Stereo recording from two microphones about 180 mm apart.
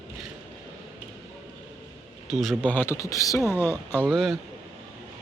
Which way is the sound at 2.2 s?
Centre (ahead or behind).